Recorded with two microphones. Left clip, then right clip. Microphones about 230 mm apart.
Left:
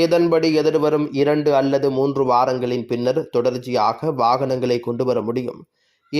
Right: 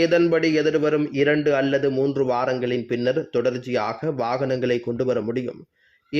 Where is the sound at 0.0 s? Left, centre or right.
Centre.